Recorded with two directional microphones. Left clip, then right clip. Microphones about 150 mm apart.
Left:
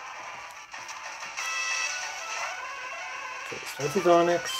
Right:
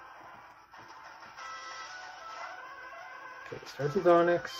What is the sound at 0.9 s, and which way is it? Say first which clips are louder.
Music: left 11 dB; 20° left (ahead or behind).